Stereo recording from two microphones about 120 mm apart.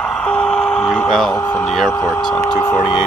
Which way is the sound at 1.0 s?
5° left (ahead or behind).